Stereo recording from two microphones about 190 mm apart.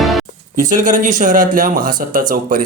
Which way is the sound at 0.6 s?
40° right (ahead or behind).